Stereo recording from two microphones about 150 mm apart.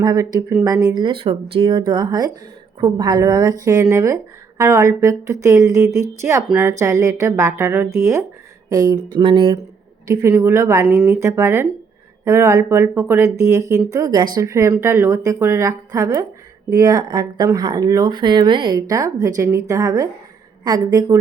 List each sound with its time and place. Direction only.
0.0 s speech: 25° right (ahead or behind)
10.1 s speech: 20° right (ahead or behind)